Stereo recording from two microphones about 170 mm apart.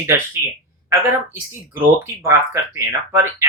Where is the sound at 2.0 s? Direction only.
15° right (ahead or behind).